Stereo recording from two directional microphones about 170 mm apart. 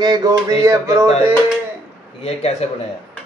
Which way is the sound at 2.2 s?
40° left (ahead or behind).